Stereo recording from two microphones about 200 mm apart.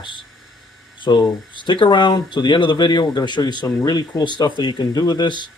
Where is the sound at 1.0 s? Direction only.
20° left (ahead or behind).